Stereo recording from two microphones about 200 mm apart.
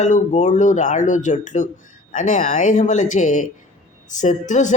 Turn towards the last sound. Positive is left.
turn(degrees=40)  # may be behind; listen again after turning